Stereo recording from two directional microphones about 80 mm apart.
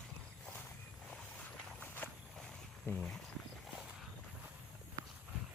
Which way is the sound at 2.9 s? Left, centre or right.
Centre.